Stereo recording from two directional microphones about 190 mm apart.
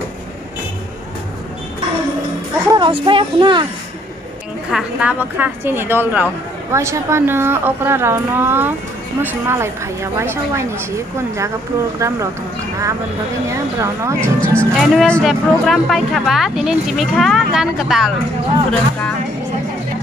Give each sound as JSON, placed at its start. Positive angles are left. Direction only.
{"t": 2.7, "sound": "speech", "side_deg": -25}
{"t": 4.6, "sound": "a woman's voice", "side_deg": -5}
{"t": 12.0, "sound": "a woman's voice", "side_deg": -15}
{"t": 13.5, "sound": "a woman's voice", "side_deg": -15}
{"t": 14.8, "sound": "speech", "side_deg": 0}